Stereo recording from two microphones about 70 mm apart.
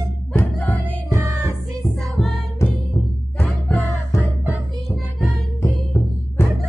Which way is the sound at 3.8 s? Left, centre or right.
Left.